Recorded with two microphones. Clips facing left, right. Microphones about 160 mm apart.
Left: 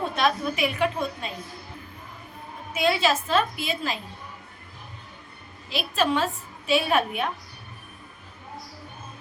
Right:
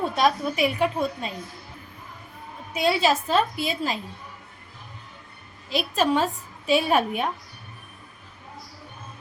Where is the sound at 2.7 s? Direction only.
40° right (ahead or behind).